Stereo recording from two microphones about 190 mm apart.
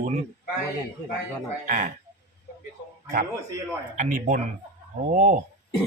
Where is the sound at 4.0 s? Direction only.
45° right (ahead or behind).